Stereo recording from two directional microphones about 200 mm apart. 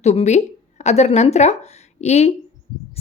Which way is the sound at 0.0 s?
35° left (ahead or behind).